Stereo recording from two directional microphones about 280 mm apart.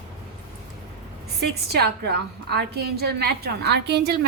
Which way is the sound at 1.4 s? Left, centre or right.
Right.